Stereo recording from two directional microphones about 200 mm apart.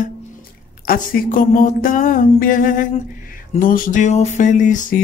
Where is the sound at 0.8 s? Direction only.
45° left (ahead or behind).